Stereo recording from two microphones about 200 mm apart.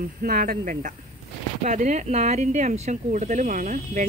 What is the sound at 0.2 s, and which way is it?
Speech, 45° right (ahead or behind).